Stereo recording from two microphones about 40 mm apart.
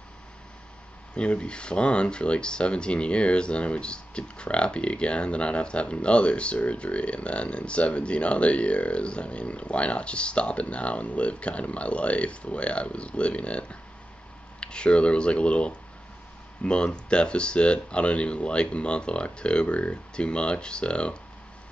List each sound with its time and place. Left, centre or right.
1.1 s speech: left